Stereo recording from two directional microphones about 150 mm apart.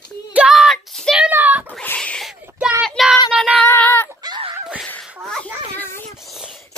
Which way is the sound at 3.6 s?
15° left (ahead or behind).